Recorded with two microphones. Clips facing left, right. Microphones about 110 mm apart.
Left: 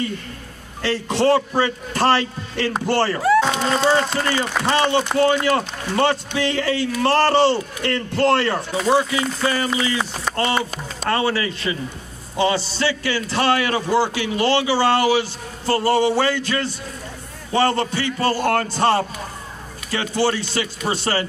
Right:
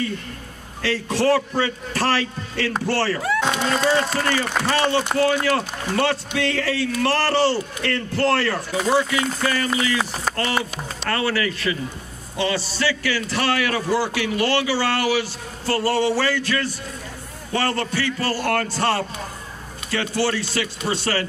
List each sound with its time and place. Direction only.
0.8 s a man's voice: 25° left (ahead or behind)